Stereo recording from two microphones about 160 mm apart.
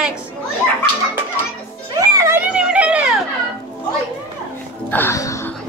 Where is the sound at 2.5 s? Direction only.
5° right (ahead or behind).